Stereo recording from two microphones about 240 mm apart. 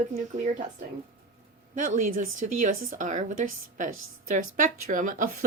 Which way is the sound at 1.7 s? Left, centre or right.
Right.